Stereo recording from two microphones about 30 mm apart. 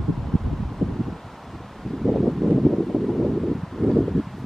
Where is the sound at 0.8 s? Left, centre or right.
Centre.